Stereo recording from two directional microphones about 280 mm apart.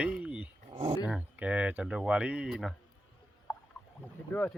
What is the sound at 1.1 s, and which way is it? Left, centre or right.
Speech, centre.